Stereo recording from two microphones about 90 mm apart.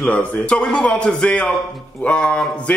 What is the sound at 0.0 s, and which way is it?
Speech, 15° left (ahead or behind).